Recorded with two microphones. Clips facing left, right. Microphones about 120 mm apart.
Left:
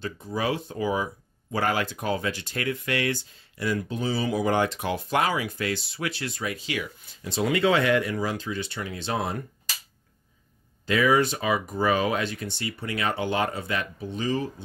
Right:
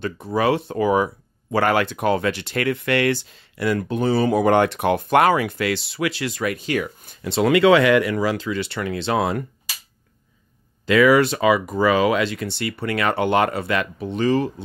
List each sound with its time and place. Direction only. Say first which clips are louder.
0.0 s speech: right 8 dB; 70° right (ahead or behind); by 7.2 s 50° right (ahead or behind)
7.2 s speech: right 8 dB; 70° right (ahead or behind)
10.9 s speech: right 7 dB; 85° right